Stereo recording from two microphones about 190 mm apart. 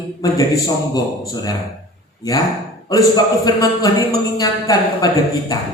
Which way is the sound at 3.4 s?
20° left (ahead or behind).